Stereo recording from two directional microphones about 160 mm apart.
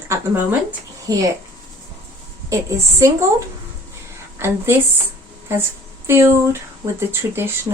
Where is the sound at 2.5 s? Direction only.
20° right (ahead or behind).